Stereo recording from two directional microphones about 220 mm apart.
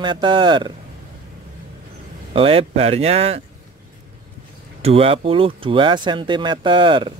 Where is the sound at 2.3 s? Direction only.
25° right (ahead or behind).